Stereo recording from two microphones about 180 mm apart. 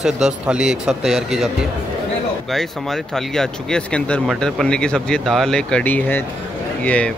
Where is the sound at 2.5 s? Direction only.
Centre (ahead or behind).